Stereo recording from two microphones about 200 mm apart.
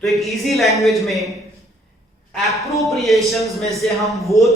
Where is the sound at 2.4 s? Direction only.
Centre (ahead or behind).